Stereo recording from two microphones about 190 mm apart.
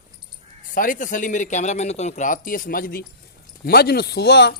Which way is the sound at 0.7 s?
45° left (ahead or behind).